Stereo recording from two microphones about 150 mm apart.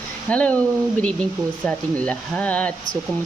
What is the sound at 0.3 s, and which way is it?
Speech, 10° left (ahead or behind).